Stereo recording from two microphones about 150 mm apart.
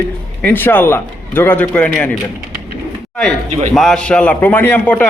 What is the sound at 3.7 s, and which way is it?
Speech, 5° left (ahead or behind).